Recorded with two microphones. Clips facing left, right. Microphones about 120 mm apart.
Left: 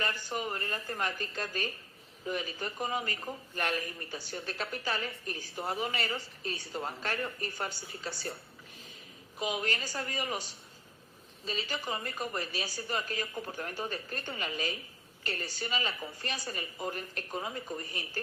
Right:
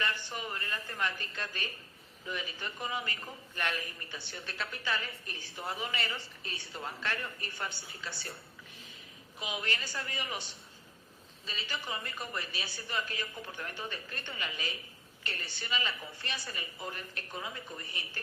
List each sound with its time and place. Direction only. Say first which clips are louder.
0.0 s a woman's voice: left 2 dB; 40° left (ahead or behind)
9.4 s a man's voice: left 4 dB; 40° left (ahead or behind)